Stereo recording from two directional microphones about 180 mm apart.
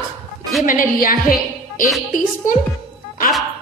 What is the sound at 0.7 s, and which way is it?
Speech, 50° left (ahead or behind).